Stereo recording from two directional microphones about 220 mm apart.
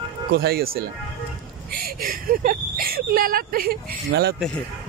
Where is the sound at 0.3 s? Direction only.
45° right (ahead or behind).